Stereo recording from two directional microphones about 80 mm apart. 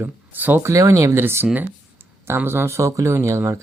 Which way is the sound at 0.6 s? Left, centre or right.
Right.